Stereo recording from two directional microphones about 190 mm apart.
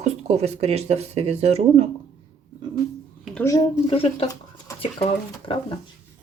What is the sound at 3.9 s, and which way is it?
Speech, 30° left (ahead or behind).